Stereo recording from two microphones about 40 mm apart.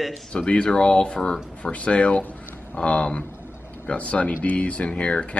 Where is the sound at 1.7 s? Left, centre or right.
Left.